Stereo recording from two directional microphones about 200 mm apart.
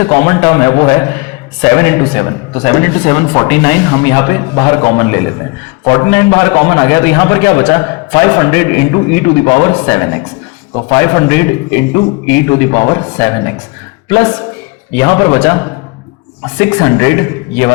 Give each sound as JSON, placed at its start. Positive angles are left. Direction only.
{"t": 0.0, "sound": "a man's voice", "side_deg": 15}